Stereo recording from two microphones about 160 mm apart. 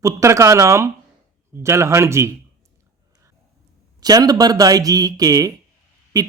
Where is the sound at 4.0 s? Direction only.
25° right (ahead or behind).